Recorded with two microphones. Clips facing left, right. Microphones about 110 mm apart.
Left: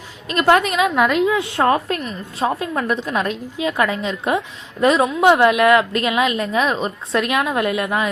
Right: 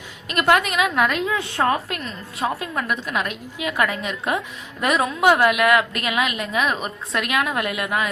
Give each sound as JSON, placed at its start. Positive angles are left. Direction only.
{"t": 0.3, "sound": "a woman's voice", "side_deg": 30}
{"t": 0.9, "sound": "a woman's voice", "side_deg": 20}
{"t": 1.6, "sound": "a woman's voice", "side_deg": 35}
{"t": 2.0, "sound": "a woman's voice", "side_deg": 20}